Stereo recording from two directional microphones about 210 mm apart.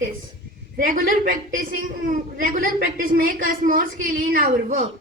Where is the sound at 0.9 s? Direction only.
40° right (ahead or behind).